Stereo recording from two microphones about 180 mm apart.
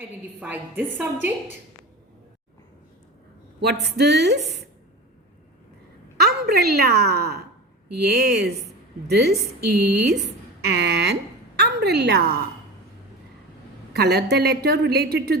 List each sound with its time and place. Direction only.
0.3 s a woman's voice: 10° right (ahead or behind)
3.9 s a woman's voice: 65° right (ahead or behind)
6.1 s a woman's voice: 60° right (ahead or behind)
13.9 s a woman's voice: 60° right (ahead or behind)